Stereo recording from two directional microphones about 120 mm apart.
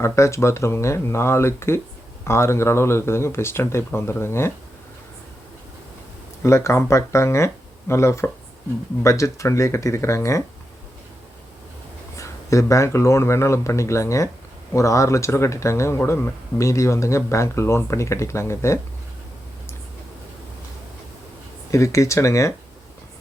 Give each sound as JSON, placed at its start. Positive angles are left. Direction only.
{"t": 0.0, "sound": "speech", "side_deg": 25}
{"t": 6.4, "sound": "speech", "side_deg": 25}
{"t": 12.1, "sound": "speech", "side_deg": 25}
{"t": 21.7, "sound": "speech", "side_deg": 25}